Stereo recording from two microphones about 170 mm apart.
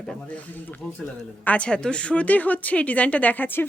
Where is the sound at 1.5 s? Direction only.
5° left (ahead or behind).